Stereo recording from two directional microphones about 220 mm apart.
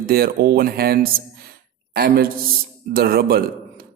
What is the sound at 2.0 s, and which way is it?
Speech, 45° right (ahead or behind).